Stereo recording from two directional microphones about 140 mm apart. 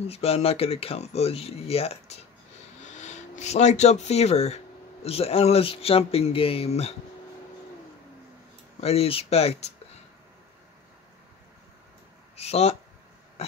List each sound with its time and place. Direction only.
0.1 s speech: 45° left (ahead or behind)
2.8 s speech: 60° left (ahead or behind)
8.8 s speech: 45° left (ahead or behind)
12.4 s speech: 50° left (ahead or behind)